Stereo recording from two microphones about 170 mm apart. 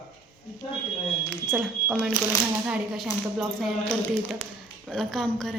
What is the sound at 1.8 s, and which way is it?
A woman's voice, 10° right (ahead or behind).